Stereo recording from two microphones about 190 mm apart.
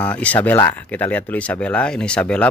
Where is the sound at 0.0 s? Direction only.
5° left (ahead or behind).